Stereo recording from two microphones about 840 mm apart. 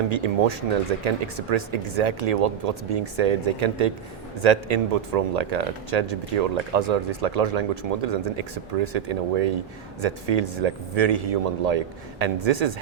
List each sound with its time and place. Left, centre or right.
0.1 s speech: right